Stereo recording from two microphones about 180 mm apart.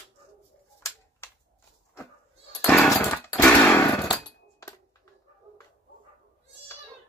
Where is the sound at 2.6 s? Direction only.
5° left (ahead or behind).